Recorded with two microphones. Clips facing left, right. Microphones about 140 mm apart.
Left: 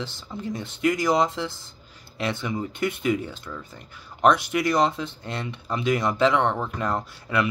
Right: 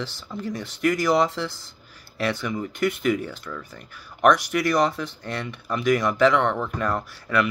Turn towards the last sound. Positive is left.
turn(degrees=25)  # may be behind; listen again after turning